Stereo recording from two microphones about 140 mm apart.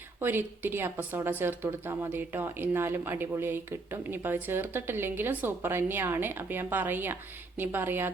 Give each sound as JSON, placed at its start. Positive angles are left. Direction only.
{"t": 0.2, "sound": "speech", "side_deg": -15}